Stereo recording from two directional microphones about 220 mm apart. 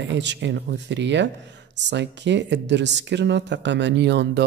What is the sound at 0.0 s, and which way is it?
Speech, 55° right (ahead or behind).